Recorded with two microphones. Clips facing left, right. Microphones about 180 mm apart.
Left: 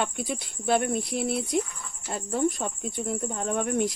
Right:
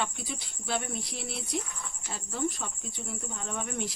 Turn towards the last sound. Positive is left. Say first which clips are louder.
# left 9 dB
turn(degrees=50)  # may be behind; listen again after turning